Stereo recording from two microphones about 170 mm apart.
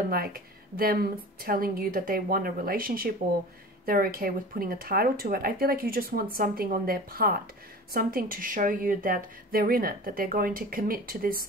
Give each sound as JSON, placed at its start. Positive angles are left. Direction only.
{"t": 0.1, "sound": "a woman's voice", "side_deg": -60}